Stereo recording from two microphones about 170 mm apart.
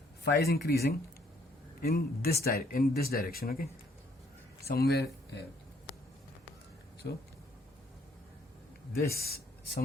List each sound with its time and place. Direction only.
0.3 s speech: 70° left (ahead or behind)
7.0 s speech: 75° left (ahead or behind)
8.9 s speech: 65° left (ahead or behind)